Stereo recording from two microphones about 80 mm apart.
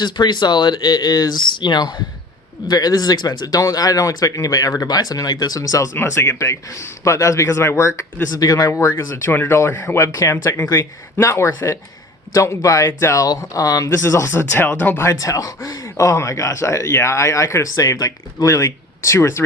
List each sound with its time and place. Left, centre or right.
0.0 s speech: left
1.5 s speech: left
5.9 s speech: left
8.9 s speech: left
14.3 s speech: left
14.9 s speech: left